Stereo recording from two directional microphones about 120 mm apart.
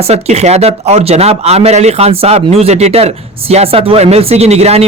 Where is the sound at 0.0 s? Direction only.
65° right (ahead or behind).